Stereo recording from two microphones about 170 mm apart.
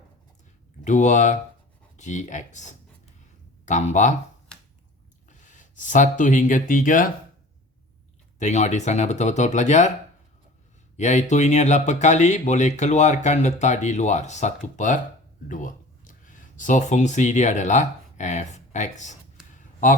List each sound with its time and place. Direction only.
0.9 s speech: 45° left (ahead or behind)
5.3 s speech: 45° left (ahead or behind)
8.4 s speech: 45° left (ahead or behind)
10.9 s speech: 45° left (ahead or behind)
19.5 s a sound: 50° left (ahead or behind)